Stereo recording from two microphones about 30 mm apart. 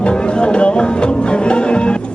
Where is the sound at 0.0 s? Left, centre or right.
Left.